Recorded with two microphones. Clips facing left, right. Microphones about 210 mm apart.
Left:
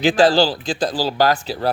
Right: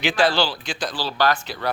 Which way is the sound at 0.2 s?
35° left (ahead or behind).